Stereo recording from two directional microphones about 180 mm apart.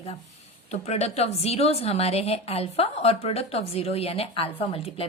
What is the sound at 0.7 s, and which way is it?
Speech, 35° left (ahead or behind).